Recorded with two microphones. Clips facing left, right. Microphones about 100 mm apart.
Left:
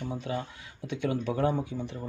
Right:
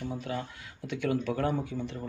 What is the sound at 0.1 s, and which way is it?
Speech, 20° left (ahead or behind).